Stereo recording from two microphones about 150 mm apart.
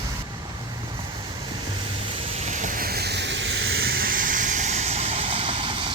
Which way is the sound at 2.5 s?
60° right (ahead or behind).